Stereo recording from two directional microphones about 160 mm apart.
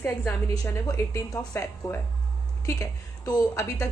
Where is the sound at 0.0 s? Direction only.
20° left (ahead or behind).